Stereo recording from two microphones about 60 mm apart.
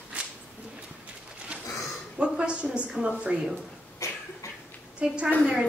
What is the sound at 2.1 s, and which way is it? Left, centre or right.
A woman's voice, centre.